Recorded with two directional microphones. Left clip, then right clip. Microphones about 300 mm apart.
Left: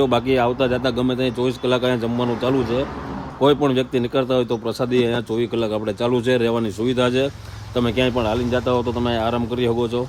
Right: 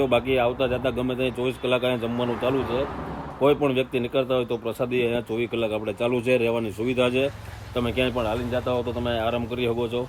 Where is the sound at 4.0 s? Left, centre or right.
Centre.